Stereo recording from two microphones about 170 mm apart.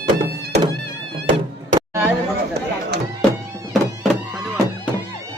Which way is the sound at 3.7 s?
Centre (ahead or behind).